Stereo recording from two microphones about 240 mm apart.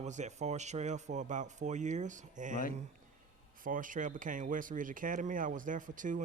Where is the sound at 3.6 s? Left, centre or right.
Right.